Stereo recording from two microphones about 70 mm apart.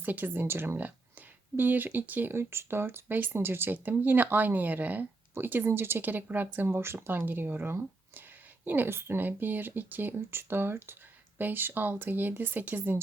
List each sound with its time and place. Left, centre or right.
0.0 s speech: right